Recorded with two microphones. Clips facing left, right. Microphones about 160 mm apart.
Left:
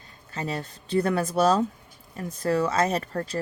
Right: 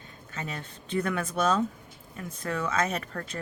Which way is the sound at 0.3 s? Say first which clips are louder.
Left 6 dB; 35° left (ahead or behind).